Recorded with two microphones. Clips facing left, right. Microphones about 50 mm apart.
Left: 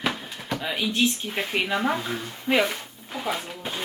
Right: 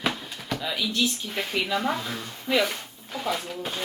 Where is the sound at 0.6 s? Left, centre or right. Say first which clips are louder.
Left 3 dB; left.